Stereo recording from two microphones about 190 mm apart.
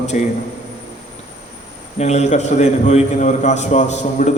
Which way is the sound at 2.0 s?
35° left (ahead or behind).